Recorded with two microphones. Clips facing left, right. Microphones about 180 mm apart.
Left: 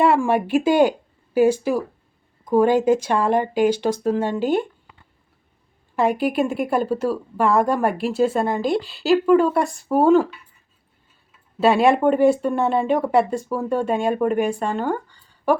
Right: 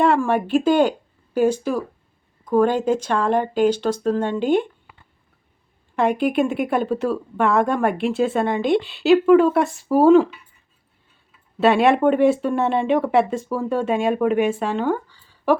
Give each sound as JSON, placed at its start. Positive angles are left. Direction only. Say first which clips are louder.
{"t": 0.0, "sound": "speech", "louder": "even", "side_deg": 10}
{"t": 6.0, "sound": "a woman's voice", "louder": "right 1 dB", "side_deg": 5}
{"t": 11.6, "sound": "a woman's voice", "louder": "even", "side_deg": 0}